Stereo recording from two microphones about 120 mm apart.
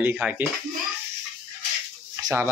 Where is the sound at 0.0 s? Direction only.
15° right (ahead or behind).